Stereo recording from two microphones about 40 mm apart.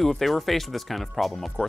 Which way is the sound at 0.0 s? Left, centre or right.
Centre.